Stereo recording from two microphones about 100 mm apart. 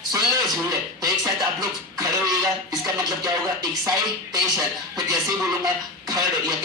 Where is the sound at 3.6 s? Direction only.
40° right (ahead or behind).